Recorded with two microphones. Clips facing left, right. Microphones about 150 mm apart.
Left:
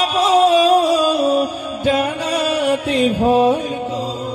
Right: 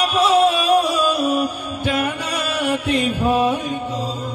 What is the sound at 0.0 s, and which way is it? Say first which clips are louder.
Music: left 2 dB; 35° left (ahead or behind).